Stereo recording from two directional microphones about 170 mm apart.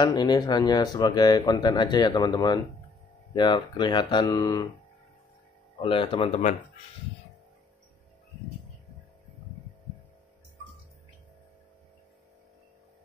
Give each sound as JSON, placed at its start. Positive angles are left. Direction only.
{"t": 0.0, "sound": "speech", "side_deg": 25}
{"t": 5.8, "sound": "speech", "side_deg": 30}